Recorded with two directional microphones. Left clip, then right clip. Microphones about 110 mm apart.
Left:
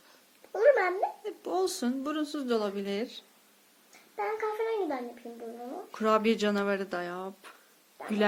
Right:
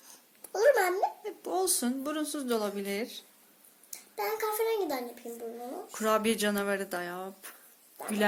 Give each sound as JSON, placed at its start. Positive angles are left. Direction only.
{"t": 0.5, "sound": "a child's voice", "side_deg": 5}
{"t": 6.0, "sound": "speech", "side_deg": 20}